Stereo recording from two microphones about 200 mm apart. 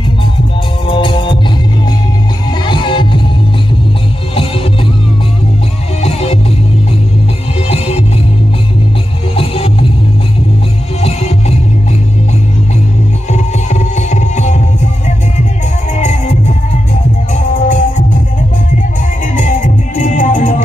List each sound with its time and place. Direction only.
0.8 s music: 25° left (ahead or behind)
2.6 s music: 25° left (ahead or behind)
5.9 s music: 30° left (ahead or behind)
7.6 s music: 30° left (ahead or behind)
9.3 s music: 30° left (ahead or behind)
11.0 s music: 30° left (ahead or behind)
13.3 s music: 35° left (ahead or behind)
16.0 s music: 35° left (ahead or behind)
17.6 s music: 40° left (ahead or behind)
19.3 s music: 40° left (ahead or behind)